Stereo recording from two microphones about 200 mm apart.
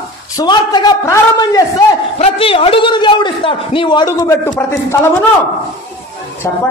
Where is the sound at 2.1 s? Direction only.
30° left (ahead or behind).